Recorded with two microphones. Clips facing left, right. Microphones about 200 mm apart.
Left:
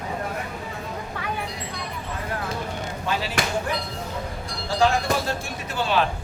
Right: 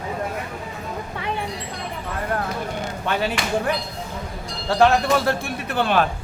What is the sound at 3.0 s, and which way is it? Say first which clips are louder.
Speech: right 2 dB; 60° right (ahead or behind).